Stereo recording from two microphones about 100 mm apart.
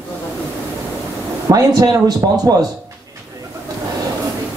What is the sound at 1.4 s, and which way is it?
Speech, 40° right (ahead or behind).